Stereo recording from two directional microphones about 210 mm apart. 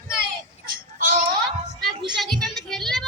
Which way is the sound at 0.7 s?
45° right (ahead or behind).